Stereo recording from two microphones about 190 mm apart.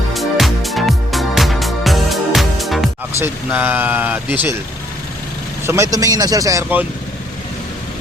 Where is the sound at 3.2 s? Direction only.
10° right (ahead or behind).